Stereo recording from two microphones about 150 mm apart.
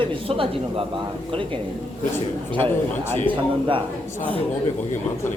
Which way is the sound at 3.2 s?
35° right (ahead or behind).